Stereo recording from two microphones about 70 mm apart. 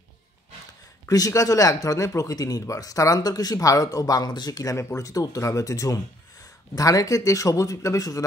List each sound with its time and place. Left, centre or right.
1.0 s speech: left
3.5 s speech: left
4.7 s speech: left